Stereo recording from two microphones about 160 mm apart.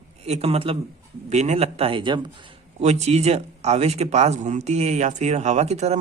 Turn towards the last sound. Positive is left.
turn(degrees=-45)  # may be behind; listen again after turning